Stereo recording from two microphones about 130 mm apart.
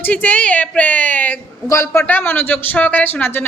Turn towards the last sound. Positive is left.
turn(degrees=15)  # may be behind; listen again after turning